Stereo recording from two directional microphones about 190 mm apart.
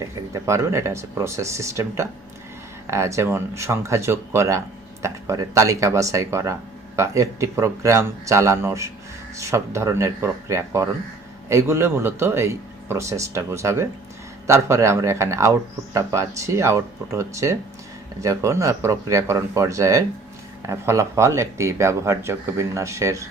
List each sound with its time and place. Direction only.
0.0 s speech: 15° right (ahead or behind)